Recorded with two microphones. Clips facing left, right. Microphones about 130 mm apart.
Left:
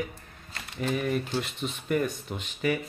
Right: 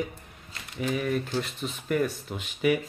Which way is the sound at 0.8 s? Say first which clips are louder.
Even; 5° right (ahead or behind).